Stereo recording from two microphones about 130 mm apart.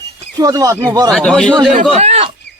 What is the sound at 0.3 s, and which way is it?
Speech, 30° right (ahead or behind).